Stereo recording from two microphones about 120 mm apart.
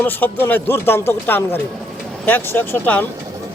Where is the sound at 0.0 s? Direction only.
15° left (ahead or behind).